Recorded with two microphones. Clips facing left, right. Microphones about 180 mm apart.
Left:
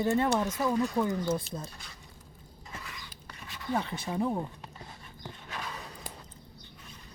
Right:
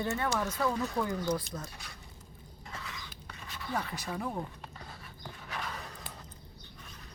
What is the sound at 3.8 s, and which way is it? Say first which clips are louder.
Speech: left 5 dB; 25° left (ahead or behind).